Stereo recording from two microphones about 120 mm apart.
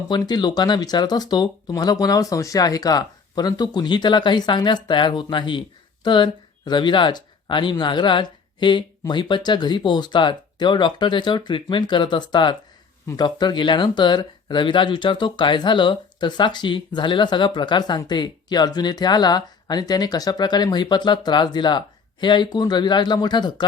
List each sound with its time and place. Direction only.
0.2 s speech: 35° left (ahead or behind)